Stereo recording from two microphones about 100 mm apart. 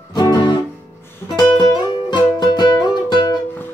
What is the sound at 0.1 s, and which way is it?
Music, 40° left (ahead or behind).